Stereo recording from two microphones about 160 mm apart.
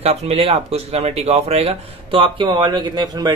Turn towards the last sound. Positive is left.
turn(degrees=-25)  # may be behind; listen again after turning